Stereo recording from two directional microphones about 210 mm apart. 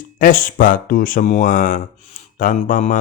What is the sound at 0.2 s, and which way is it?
Speech, 40° left (ahead or behind).